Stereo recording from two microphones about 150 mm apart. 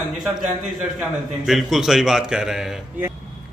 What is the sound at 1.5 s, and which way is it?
A man's voice, centre (ahead or behind).